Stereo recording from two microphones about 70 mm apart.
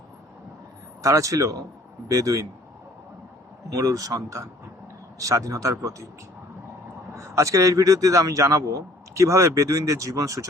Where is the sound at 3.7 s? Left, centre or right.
Right.